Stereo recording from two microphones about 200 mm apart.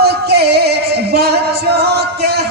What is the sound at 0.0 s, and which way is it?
Music, 55° right (ahead or behind).